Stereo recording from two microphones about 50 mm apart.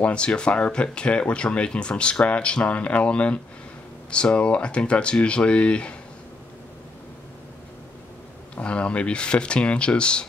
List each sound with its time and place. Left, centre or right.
0.0 s speech: left
8.5 s speech: left